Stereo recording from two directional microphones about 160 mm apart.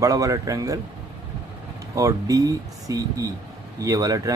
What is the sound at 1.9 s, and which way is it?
Speech, 20° right (ahead or behind).